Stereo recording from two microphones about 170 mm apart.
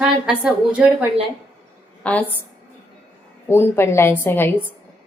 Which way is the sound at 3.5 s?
15° left (ahead or behind).